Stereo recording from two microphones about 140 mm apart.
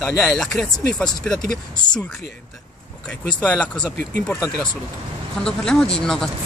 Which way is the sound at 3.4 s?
10° left (ahead or behind).